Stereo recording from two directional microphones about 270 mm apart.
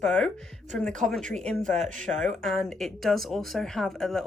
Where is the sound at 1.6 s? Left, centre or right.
Right.